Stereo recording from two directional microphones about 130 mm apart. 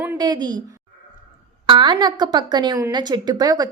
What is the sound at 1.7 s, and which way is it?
A woman's voice, 35° right (ahead or behind).